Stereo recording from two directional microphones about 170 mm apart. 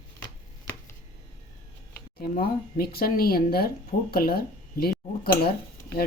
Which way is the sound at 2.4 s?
60° left (ahead or behind).